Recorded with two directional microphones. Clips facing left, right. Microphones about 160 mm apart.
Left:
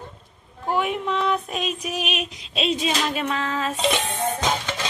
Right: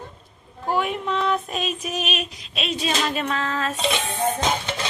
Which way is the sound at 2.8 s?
10° left (ahead or behind).